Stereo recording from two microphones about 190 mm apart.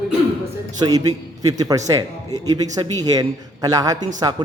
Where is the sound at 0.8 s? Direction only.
20° right (ahead or behind).